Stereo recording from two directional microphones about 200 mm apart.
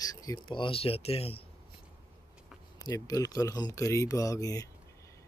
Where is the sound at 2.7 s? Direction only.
20° left (ahead or behind).